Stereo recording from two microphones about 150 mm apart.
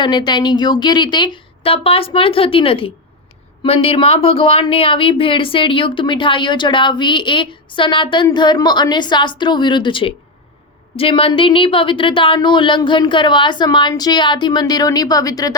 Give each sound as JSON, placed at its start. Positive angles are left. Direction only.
{"t": 0.0, "sound": "speech", "side_deg": 30}